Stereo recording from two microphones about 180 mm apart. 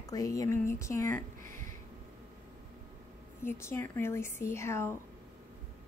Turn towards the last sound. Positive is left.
turn(degrees=15)  # may be behind; listen again after turning